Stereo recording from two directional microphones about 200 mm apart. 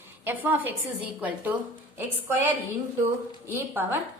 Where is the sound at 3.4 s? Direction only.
10° right (ahead or behind).